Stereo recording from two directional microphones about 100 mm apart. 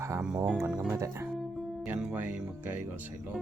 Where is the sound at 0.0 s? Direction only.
30° right (ahead or behind).